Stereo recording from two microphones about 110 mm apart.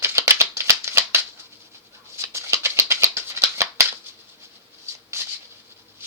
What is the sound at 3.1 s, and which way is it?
Rattle, 25° right (ahead or behind).